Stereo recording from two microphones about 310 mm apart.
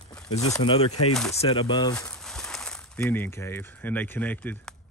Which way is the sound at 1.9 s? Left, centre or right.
Centre.